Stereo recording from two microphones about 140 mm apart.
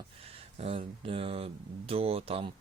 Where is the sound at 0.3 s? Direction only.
45° right (ahead or behind).